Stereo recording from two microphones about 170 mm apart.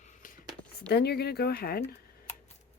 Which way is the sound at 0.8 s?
75° left (ahead or behind).